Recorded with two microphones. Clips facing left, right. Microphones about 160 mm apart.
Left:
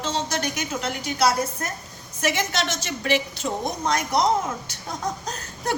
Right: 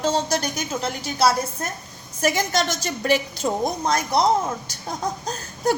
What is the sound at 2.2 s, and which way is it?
A woman's voice, 40° right (ahead or behind).